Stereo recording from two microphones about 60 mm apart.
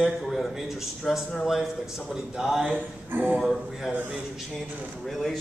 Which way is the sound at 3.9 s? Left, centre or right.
Right.